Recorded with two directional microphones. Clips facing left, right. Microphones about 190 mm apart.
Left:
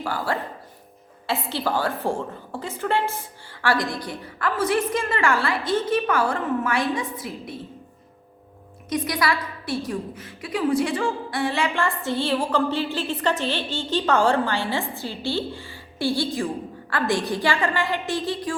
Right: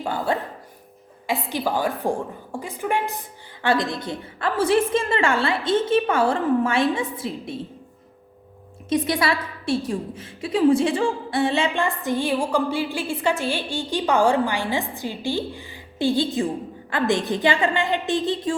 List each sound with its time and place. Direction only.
0.0 s a woman's voice: 20° right (ahead or behind)
8.9 s a woman's voice: 25° right (ahead or behind)